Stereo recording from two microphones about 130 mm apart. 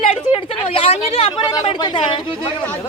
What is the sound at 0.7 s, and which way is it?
Speech, 50° left (ahead or behind).